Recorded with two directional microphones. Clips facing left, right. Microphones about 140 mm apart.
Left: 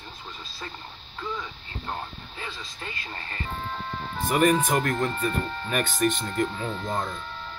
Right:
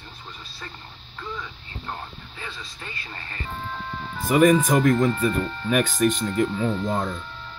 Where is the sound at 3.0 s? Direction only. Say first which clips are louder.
Left 1 dB; 30° left (ahead or behind).